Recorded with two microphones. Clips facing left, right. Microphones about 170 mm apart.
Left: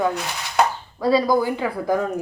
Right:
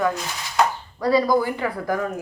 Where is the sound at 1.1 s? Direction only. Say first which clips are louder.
Left 1 dB; 15° left (ahead or behind).